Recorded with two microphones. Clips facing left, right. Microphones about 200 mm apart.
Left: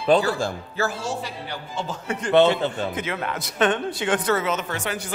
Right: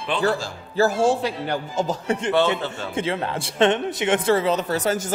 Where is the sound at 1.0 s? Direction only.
50° right (ahead or behind).